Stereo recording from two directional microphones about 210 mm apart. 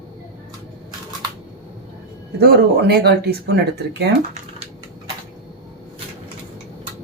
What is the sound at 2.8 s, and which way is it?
Speech, 50° right (ahead or behind).